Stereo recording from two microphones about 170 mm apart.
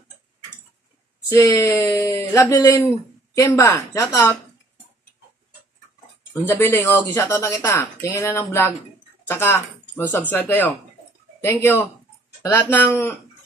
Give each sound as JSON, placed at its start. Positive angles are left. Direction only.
{"t": 1.3, "sound": "speech", "side_deg": 15}
{"t": 6.4, "sound": "speech", "side_deg": 15}